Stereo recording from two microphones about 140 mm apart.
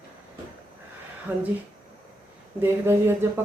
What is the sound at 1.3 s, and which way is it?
Speech, 15° right (ahead or behind).